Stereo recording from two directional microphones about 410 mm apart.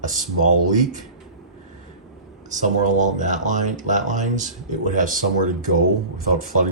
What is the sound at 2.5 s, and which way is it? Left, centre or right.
Speech, centre.